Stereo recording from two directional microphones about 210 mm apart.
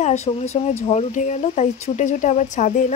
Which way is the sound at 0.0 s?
30° left (ahead or behind).